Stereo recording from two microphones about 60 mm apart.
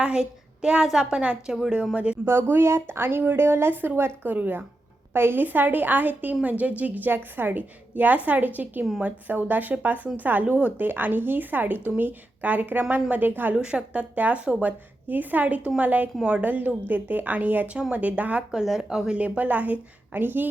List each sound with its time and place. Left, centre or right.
0.0 s a woman's voice: centre
2.2 s a woman's voice: right
13.6 s a woman's voice: centre
16.2 s a woman's voice: centre
16.5 s a woman's voice: right
18.5 s speech: centre
19.2 s a woman's voice: right